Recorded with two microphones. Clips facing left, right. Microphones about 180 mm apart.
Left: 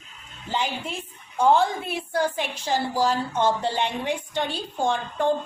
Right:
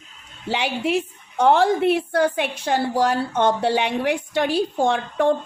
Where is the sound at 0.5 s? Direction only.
75° right (ahead or behind).